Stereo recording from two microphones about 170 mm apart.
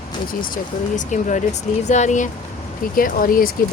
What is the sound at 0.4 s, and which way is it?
Speech, 50° left (ahead or behind).